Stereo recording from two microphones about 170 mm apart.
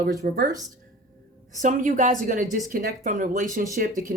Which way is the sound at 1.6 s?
50° right (ahead or behind).